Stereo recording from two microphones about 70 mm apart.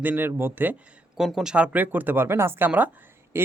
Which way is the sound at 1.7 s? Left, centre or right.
Right.